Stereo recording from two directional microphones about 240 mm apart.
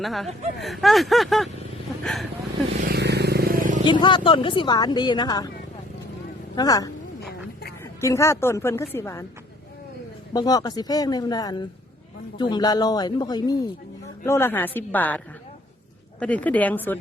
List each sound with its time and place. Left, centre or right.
0.0 s speech: centre
2.8 s vehicle: right
3.8 s speech: centre
6.6 s speech: centre
7.2 s a sound: left
8.0 s speech: centre
10.3 s speech: centre
16.2 s speech: centre